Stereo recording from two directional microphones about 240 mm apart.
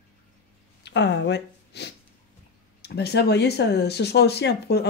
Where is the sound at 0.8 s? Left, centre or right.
Left.